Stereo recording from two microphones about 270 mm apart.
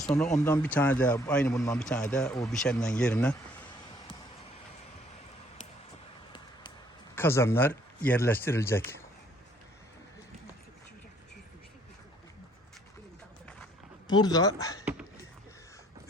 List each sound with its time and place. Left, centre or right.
0.0 s speech: centre
7.2 s speech: centre
14.1 s speech: centre